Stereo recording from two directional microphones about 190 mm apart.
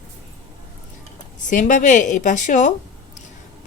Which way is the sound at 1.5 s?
40° left (ahead or behind).